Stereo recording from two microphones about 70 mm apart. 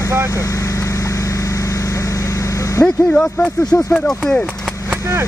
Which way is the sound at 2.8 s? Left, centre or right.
Centre.